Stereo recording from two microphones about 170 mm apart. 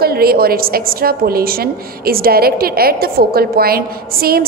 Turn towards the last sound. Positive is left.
turn(degrees=-60)  # may be behind; listen again after turning